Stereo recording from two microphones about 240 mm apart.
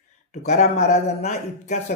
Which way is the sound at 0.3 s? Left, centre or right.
Left.